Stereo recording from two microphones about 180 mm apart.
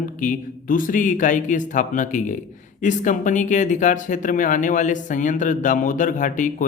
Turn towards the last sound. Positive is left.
turn(degrees=45)  # may be behind; listen again after turning